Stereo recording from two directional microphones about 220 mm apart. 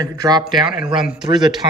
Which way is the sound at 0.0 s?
20° right (ahead or behind).